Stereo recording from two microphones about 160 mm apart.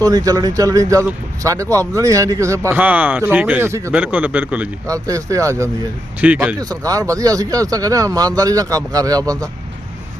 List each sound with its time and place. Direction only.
0.0 s speech: 20° right (ahead or behind)
4.9 s speech: 20° right (ahead or behind)
6.1 s speech: 10° right (ahead or behind)
6.6 s speech: 20° right (ahead or behind)